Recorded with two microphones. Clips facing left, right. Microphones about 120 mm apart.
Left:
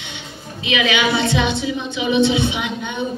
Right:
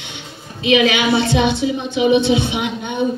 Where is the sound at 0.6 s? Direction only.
50° right (ahead or behind).